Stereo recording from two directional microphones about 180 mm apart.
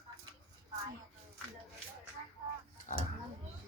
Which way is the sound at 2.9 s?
45° left (ahead or behind).